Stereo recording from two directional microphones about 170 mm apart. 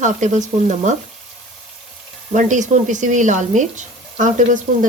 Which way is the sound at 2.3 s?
45° right (ahead or behind).